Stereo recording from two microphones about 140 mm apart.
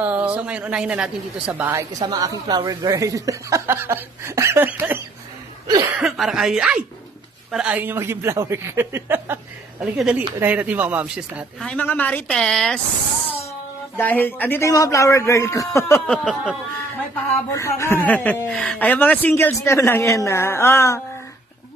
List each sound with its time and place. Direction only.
0.0 s speech: 10° right (ahead or behind)
5.9 s speech: centre (ahead or behind)
11.6 s a man's voice: 10° left (ahead or behind)
13.9 s a man's voice: 15° left (ahead or behind)
16.1 s a man's voice: 5° left (ahead or behind)
17.1 s a man's voice: 20° left (ahead or behind)